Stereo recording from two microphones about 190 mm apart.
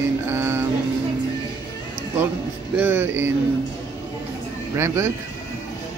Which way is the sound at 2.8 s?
10° right (ahead or behind).